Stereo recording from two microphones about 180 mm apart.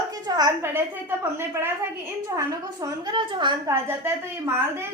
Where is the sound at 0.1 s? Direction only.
20° right (ahead or behind).